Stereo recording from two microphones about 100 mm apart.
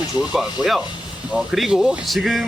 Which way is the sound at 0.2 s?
5° right (ahead or behind).